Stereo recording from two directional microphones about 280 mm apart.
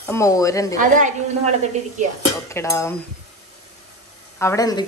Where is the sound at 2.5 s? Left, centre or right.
Centre.